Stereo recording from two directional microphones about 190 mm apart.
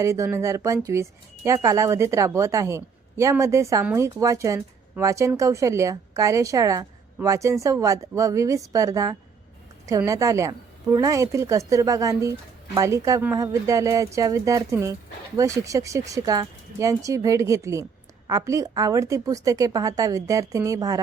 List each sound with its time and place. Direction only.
0.0 s a woman's voice: 15° right (ahead or behind)